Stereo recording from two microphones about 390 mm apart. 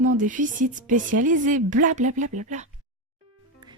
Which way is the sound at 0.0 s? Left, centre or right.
Centre.